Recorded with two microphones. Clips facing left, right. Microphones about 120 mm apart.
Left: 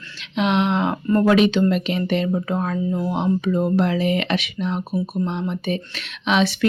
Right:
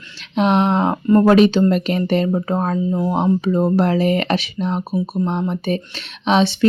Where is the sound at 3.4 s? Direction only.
35° right (ahead or behind).